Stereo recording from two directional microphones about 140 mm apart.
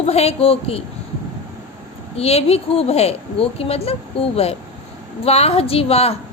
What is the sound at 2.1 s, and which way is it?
A woman's voice, 45° left (ahead or behind).